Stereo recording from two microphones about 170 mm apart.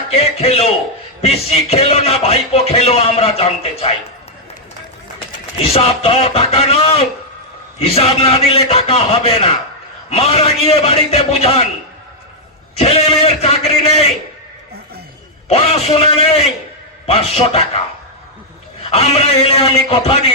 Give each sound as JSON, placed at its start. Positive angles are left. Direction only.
{"t": 0.1, "sound": "speech", "side_deg": 35}
{"t": 5.6, "sound": "speech", "side_deg": 35}
{"t": 12.7, "sound": "speech", "side_deg": 35}
{"t": 15.4, "sound": "speech", "side_deg": 35}